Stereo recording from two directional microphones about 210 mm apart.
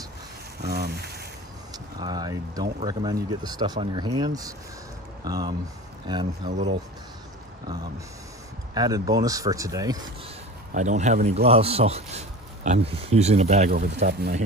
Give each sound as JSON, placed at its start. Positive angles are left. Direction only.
{"t": 0.6, "sound": "a sound", "side_deg": -50}
{"t": 1.7, "sound": "a sound", "side_deg": -20}
{"t": 2.8, "sound": "a man's voice", "side_deg": -20}
{"t": 7.6, "sound": "a man's voice", "side_deg": -20}
{"t": 10.7, "sound": "a man's voice", "side_deg": -35}
{"t": 13.7, "sound": "speech", "side_deg": -50}